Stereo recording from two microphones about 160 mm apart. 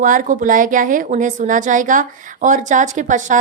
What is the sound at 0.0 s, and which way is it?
A woman's voice, 55° right (ahead or behind).